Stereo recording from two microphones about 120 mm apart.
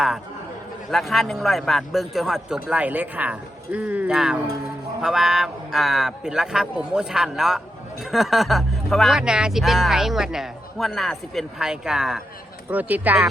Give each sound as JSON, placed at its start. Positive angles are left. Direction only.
{"t": 0.9, "sound": "speech", "side_deg": 0}
{"t": 12.7, "sound": "speech", "side_deg": -15}